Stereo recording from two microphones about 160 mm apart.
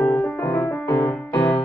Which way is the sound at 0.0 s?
10° left (ahead or behind).